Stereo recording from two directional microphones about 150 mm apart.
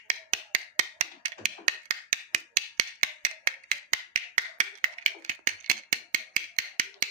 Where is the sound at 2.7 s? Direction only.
55° right (ahead or behind).